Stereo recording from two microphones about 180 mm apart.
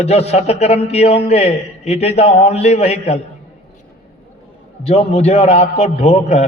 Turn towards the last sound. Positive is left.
turn(degrees=40)  # may be behind; listen again after turning